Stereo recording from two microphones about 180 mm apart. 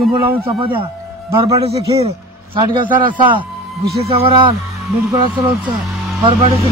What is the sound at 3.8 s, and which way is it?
Speech, 60° right (ahead or behind).